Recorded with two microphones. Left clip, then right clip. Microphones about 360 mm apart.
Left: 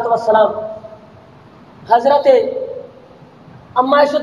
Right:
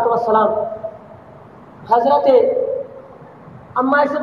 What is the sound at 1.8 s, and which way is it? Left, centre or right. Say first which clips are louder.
Speech: left 2 dB; centre.